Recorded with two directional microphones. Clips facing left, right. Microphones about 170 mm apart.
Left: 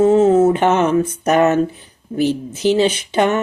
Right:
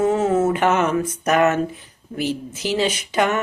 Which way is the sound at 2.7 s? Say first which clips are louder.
Left 5 dB; 30° left (ahead or behind).